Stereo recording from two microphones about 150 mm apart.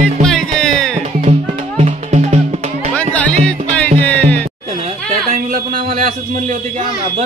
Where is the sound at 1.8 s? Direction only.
45° right (ahead or behind).